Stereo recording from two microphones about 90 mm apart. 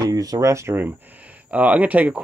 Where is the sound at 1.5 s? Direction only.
15° right (ahead or behind).